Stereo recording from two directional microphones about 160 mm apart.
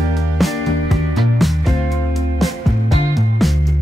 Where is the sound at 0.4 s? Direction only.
Centre (ahead or behind).